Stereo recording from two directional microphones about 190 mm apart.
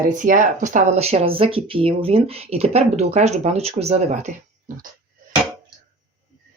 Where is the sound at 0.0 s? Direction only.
45° right (ahead or behind).